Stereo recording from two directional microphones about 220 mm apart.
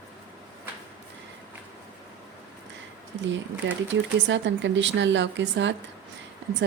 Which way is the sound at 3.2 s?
55° right (ahead or behind).